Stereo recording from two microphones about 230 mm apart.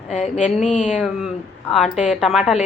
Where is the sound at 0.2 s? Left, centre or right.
Centre.